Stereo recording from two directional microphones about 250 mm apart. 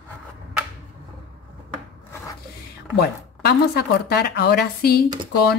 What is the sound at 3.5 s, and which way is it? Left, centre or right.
Speech, left.